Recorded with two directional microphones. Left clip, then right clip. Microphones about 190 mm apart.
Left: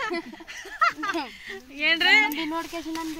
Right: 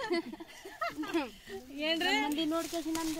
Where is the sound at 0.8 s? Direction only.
15° right (ahead or behind).